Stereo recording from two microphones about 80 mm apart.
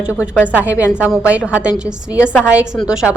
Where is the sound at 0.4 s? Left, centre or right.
Centre.